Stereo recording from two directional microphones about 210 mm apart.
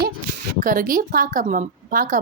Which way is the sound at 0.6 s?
40° right (ahead or behind).